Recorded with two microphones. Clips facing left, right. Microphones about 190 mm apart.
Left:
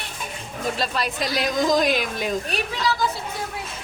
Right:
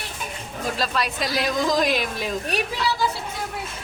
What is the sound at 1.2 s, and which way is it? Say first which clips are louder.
A woman's voice: left 2 dB; centre (ahead or behind).